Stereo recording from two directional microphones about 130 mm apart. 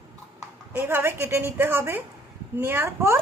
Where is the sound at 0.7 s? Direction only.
15° right (ahead or behind).